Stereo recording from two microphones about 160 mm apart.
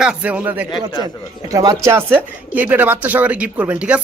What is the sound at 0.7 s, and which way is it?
Speech, 25° left (ahead or behind).